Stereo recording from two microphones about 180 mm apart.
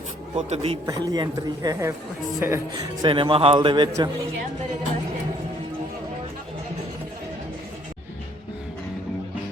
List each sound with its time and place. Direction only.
0.3 s speech: 30° right (ahead or behind)
0.9 s a man's voice: 20° right (ahead or behind)
3.0 s a man's voice: 30° right (ahead or behind)